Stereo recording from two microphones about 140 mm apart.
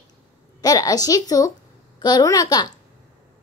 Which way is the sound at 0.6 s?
25° left (ahead or behind).